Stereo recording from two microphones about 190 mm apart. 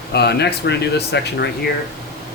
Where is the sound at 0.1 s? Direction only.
60° left (ahead or behind).